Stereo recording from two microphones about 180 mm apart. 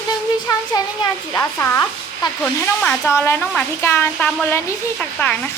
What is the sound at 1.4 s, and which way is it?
Speech, 10° left (ahead or behind).